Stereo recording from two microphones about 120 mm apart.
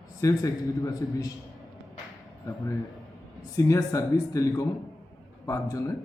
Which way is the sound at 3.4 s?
30° left (ahead or behind).